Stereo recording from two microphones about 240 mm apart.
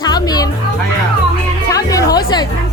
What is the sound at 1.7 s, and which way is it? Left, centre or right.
Music, centre.